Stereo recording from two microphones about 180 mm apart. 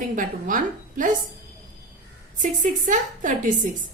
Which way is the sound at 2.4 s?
45° right (ahead or behind).